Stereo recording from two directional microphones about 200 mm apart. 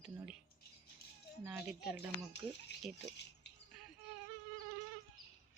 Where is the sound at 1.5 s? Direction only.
5° right (ahead or behind).